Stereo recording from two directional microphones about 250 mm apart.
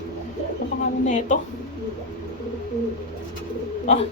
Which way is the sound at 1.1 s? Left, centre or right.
Left.